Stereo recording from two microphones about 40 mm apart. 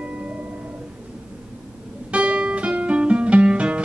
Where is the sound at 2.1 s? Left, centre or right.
Right.